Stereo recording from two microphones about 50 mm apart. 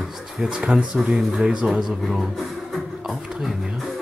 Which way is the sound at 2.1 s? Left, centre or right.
Centre.